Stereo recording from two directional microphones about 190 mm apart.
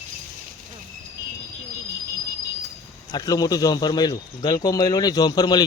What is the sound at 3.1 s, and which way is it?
A man's voice, 20° left (ahead or behind).